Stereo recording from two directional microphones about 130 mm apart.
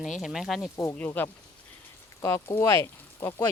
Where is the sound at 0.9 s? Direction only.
15° left (ahead or behind).